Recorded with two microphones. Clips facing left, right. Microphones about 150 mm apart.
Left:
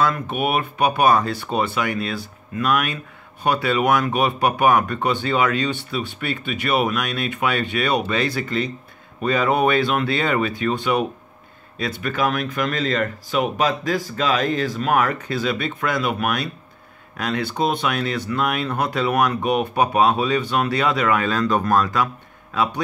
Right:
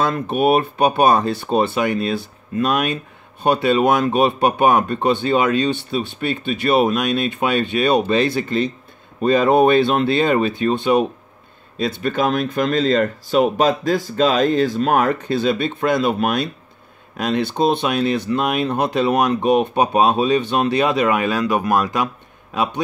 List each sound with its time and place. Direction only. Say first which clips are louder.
0.0 s speech: right 4 dB; 30° right (ahead or behind)